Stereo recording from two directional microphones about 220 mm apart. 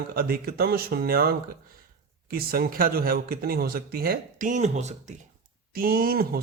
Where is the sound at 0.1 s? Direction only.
40° right (ahead or behind).